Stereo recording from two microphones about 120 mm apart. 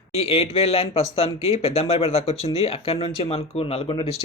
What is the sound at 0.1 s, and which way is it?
Speech, 55° left (ahead or behind).